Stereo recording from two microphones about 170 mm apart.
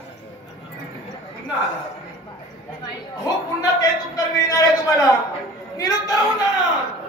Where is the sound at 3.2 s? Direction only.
20° left (ahead or behind).